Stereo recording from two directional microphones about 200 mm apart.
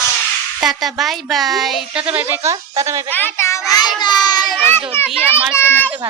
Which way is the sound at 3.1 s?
10° left (ahead or behind).